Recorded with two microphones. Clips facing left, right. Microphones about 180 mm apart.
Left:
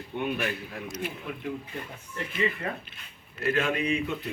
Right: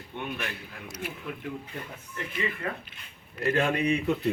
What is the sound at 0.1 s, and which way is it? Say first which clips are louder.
Speech: left 5 dB; 10° left (ahead or behind).